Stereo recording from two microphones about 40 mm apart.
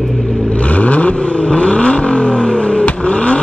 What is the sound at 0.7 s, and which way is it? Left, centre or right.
Vehicle, left.